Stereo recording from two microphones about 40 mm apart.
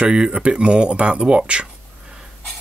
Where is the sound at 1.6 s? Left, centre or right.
Centre.